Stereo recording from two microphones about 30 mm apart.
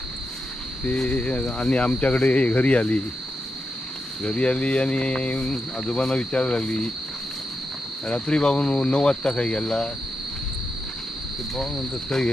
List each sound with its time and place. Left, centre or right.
1.0 s speech: left
4.2 s speech: left
5.4 s speech: left
8.1 s speech: left